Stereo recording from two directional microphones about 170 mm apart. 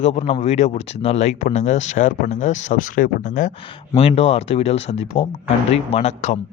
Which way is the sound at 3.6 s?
30° left (ahead or behind).